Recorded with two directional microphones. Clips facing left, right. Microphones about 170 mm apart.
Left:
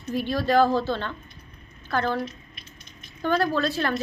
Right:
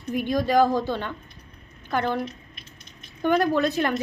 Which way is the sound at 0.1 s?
15° right (ahead or behind).